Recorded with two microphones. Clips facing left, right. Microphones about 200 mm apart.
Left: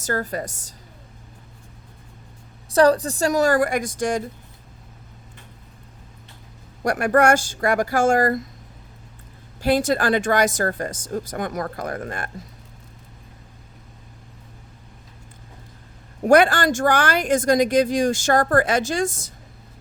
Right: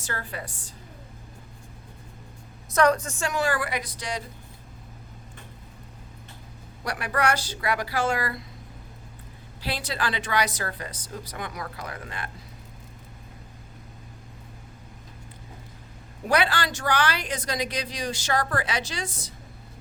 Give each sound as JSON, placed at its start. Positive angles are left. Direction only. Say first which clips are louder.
{"t": 0.0, "sound": "a woman's voice", "louder": "left 9 dB", "side_deg": 40}
{"t": 2.7, "sound": "a woman's voice", "louder": "left 6 dB", "side_deg": 35}
{"t": 6.8, "sound": "speech", "louder": "left 9 dB", "side_deg": 50}
{"t": 9.6, "sound": "speech", "louder": "left 12 dB", "side_deg": 45}
{"t": 16.2, "sound": "speech", "louder": "left 9 dB", "side_deg": 50}